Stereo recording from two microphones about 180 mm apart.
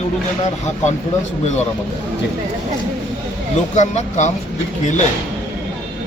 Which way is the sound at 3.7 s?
40° left (ahead or behind).